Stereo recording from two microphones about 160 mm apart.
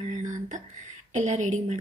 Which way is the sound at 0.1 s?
50° right (ahead or behind).